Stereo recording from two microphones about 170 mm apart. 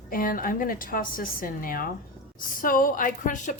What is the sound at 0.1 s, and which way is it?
A woman's voice, 55° left (ahead or behind).